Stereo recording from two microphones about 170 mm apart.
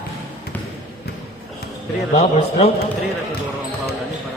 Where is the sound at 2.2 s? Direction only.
35° left (ahead or behind).